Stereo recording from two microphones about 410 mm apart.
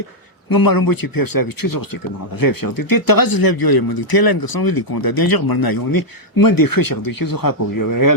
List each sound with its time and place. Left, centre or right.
0.5 s speech: left